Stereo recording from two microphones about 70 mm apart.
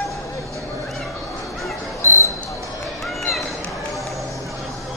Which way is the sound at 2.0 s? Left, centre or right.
Right.